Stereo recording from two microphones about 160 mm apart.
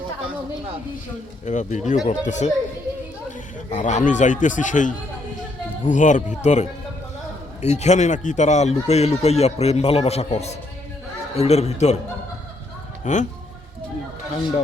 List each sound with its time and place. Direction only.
1.5 s speech: 50° left (ahead or behind)
3.7 s speech: 50° left (ahead or behind)
13.1 s speech: 50° left (ahead or behind)